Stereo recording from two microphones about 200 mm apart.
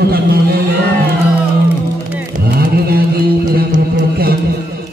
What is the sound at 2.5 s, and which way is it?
Mantra, 50° right (ahead or behind).